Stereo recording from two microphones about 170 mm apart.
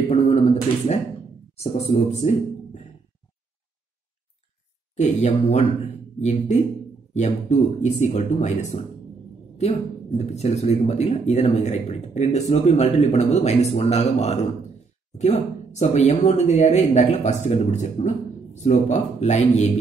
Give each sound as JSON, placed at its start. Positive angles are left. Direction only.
{"t": 0.1, "sound": "a sound", "side_deg": 40}
{"t": 1.6, "sound": "a man's voice", "side_deg": 40}
{"t": 4.9, "sound": "speech", "side_deg": 40}